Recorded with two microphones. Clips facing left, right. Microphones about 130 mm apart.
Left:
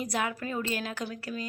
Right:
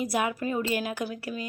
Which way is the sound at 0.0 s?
15° right (ahead or behind).